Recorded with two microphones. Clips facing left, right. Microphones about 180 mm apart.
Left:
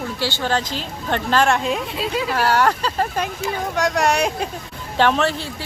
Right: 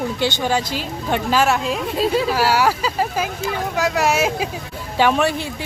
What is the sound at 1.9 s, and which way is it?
Speech, 40° right (ahead or behind).